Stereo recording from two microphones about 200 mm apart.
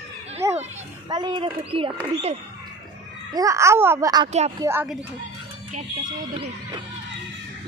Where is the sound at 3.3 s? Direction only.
15° right (ahead or behind).